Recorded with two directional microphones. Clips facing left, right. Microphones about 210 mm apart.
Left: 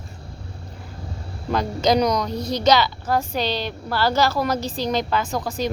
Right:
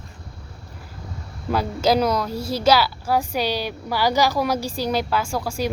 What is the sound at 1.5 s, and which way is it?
A woman's voice, 5° right (ahead or behind).